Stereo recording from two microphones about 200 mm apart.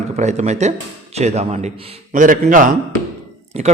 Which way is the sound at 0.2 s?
35° right (ahead or behind).